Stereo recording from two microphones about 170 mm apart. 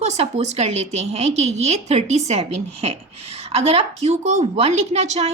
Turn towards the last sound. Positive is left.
turn(degrees=-40)  # may be behind; listen again after turning